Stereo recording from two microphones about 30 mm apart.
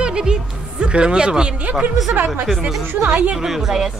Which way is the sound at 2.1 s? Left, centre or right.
Right.